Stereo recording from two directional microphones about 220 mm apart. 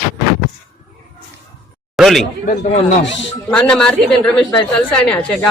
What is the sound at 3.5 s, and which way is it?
A woman's voice, 5° left (ahead or behind).